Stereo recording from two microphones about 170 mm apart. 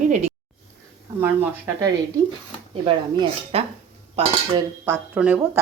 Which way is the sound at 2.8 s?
30° right (ahead or behind).